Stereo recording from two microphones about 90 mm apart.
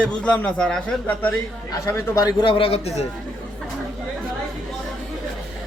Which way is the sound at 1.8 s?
35° left (ahead or behind).